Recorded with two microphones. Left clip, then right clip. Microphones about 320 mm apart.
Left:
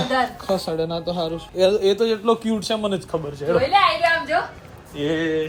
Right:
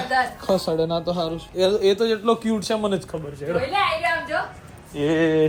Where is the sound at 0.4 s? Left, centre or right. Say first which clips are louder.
Right 2 dB; centre.